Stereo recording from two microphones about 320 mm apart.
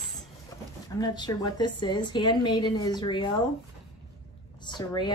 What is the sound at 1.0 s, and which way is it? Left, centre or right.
A woman's voice, centre.